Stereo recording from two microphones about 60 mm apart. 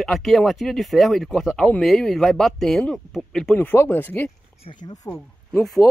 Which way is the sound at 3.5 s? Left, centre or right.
Left.